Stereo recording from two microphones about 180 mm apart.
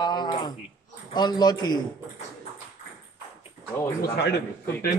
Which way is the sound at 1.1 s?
25° left (ahead or behind).